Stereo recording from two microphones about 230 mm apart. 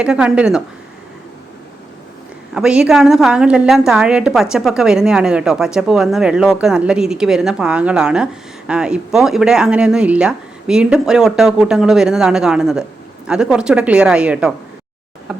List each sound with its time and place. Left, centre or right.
0.0 s a woman's voice: centre
2.6 s a woman's voice: centre
15.3 s a sound: centre